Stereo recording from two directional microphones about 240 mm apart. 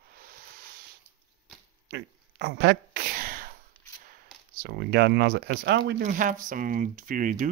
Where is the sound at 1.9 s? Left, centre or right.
Right.